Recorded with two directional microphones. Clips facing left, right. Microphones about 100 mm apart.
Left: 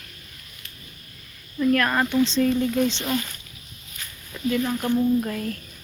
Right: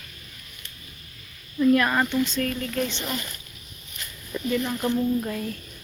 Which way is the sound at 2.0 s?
20° left (ahead or behind).